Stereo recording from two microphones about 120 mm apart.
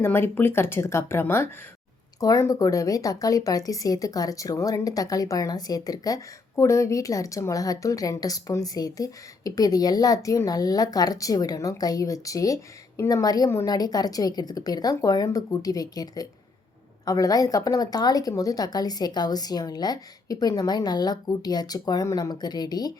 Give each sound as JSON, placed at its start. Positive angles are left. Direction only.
{"t": 0.0, "sound": "speech", "side_deg": 20}